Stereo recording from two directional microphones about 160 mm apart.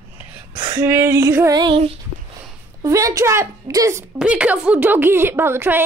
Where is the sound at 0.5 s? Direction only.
30° right (ahead or behind).